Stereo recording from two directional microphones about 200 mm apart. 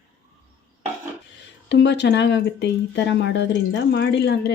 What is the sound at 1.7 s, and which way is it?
Speech, 60° left (ahead or behind).